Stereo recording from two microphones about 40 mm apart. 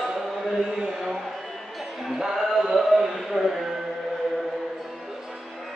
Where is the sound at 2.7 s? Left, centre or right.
Centre.